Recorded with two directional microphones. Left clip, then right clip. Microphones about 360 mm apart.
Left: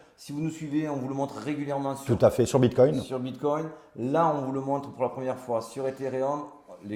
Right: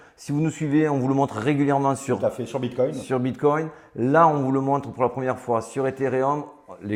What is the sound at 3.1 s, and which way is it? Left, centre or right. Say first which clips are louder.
A man's voice: right 7 dB; right.